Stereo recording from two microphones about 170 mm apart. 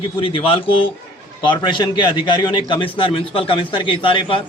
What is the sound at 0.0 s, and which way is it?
A man's voice, 30° left (ahead or behind).